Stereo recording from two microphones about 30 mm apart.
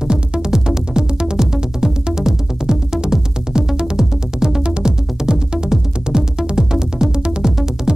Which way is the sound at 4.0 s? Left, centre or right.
Centre.